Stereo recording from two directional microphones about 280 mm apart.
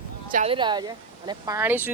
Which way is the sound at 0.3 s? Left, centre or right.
Right.